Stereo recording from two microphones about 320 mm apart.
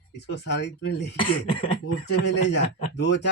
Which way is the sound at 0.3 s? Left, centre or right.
Left.